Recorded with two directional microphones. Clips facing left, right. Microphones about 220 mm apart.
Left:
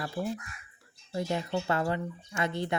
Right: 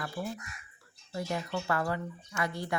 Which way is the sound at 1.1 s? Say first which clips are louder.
Left 3 dB; 25° left (ahead or behind).